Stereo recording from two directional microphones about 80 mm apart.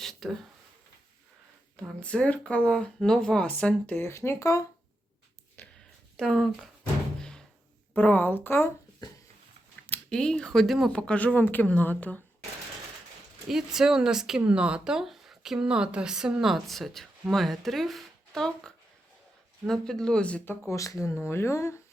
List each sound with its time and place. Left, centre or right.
0.0 s a sound: centre
2.0 s speech: centre
3.9 s speech: left
6.1 s speech: centre
7.2 s door: centre
7.9 s a woman's voice: left
10.1 s speech: centre
10.9 s speech: centre
13.5 s speech: centre
20.4 s a woman's voice: left
20.7 s speech: left